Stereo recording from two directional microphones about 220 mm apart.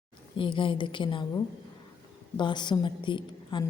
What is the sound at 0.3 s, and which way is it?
Speech, 25° left (ahead or behind).